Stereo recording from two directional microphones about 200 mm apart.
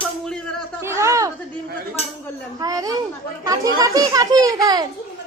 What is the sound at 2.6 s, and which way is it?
A child's voice, 15° right (ahead or behind).